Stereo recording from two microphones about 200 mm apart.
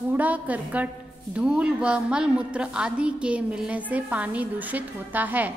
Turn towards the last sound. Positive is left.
turn(degrees=-10)  # may be behind; listen again after turning